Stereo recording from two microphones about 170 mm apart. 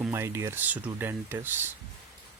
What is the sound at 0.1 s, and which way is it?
Speech, 15° right (ahead or behind).